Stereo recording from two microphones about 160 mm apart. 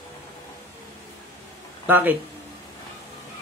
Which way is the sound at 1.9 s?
10° right (ahead or behind).